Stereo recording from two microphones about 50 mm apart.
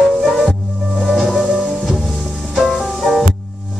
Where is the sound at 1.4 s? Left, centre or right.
Centre.